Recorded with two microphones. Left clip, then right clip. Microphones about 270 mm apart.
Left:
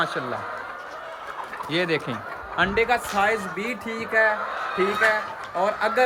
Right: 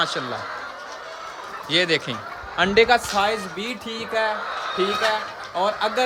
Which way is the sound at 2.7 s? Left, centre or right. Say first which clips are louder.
Right 7 dB; right.